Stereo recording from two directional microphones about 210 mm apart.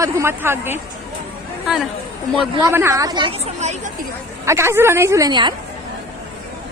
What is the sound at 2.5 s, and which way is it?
Speech, 15° right (ahead or behind).